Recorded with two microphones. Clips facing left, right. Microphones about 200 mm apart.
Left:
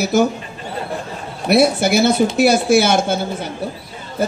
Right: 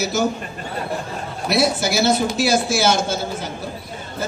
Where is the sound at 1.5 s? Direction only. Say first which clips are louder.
Left 6 dB; 55° left (ahead or behind).